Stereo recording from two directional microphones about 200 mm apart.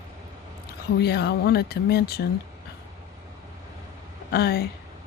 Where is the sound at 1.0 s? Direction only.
55° left (ahead or behind).